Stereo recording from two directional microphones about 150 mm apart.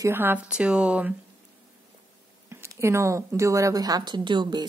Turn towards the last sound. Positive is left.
turn(degrees=-30)  # may be behind; listen again after turning